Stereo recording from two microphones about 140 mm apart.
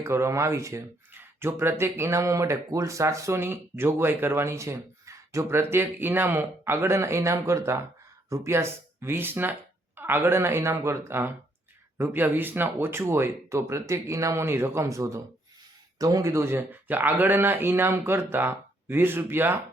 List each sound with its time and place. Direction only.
0.0 s speech: 20° right (ahead or behind)